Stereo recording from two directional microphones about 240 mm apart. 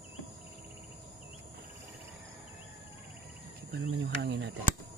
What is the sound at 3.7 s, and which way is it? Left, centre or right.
Speech, right.